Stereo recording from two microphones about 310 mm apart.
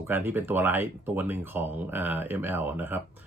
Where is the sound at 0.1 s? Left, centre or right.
Centre.